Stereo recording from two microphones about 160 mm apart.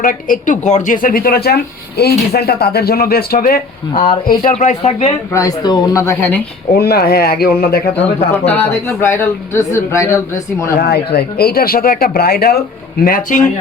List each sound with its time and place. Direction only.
0.0 s speech: 55° left (ahead or behind)
4.5 s speech: 45° left (ahead or behind)
5.3 s speech: 20° left (ahead or behind)
6.7 s speech: 75° left (ahead or behind)
8.4 s a man's voice: 10° left (ahead or behind)
10.8 s speech: 80° left
13.1 s speech: 60° left (ahead or behind)